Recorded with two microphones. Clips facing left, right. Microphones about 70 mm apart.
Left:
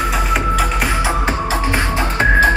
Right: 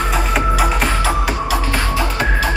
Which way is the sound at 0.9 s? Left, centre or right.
Centre.